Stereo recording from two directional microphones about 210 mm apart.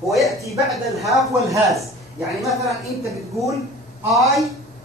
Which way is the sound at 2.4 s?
Centre (ahead or behind).